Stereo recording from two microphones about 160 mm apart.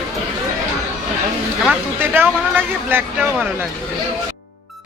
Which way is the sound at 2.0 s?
15° right (ahead or behind).